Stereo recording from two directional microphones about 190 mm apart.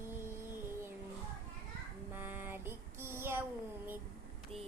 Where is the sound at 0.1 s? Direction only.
10° right (ahead or behind).